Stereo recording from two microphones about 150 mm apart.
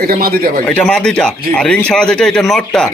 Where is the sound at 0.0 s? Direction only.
80° right.